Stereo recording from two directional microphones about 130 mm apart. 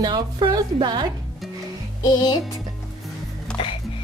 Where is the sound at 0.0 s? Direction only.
35° right (ahead or behind).